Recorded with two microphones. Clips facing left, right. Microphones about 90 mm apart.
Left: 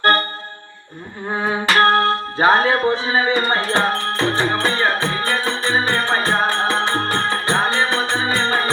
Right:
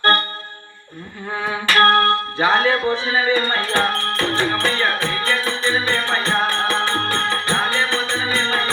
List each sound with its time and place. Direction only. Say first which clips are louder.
1.3 s music: left 2 dB; 30° left (ahead or behind)